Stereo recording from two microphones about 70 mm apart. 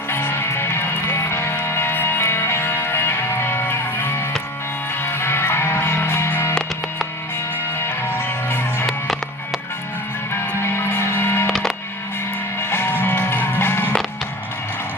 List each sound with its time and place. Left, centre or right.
0.1 s music: left
7.9 s music: left
10.6 s a sound: left
12.5 s music: left